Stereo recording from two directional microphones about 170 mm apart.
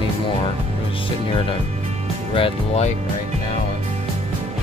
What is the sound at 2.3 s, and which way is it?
Speech, 35° left (ahead or behind).